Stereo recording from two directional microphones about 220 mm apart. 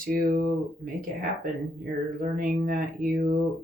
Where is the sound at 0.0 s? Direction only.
40° right (ahead or behind).